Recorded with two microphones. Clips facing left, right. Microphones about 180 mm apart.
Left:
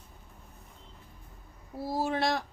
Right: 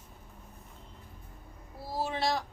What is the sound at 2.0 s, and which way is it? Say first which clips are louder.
Speech: left 1 dB; 55° left (ahead or behind).